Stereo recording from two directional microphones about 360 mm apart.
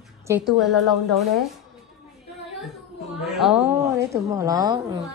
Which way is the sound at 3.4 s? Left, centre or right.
Centre.